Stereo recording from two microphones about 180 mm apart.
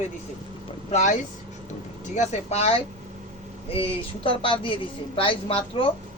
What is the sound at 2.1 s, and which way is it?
Speech, 40° left (ahead or behind).